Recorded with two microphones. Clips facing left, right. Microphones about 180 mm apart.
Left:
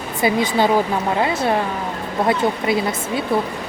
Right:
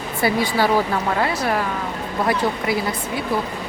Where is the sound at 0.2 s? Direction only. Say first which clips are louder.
Left 2 dB; 20° left (ahead or behind).